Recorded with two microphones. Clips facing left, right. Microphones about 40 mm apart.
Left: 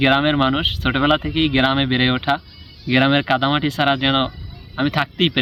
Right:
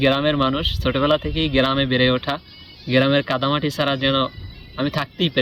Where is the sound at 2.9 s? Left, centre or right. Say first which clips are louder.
Even; centre.